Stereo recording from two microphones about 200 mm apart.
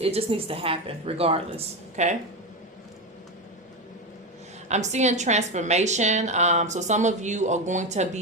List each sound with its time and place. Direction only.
0.0 s a woman's voice: 30° right (ahead or behind)
4.7 s a woman's voice: 35° right (ahead or behind)